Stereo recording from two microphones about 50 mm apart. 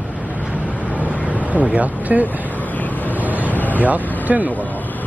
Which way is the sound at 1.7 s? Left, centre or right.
Right.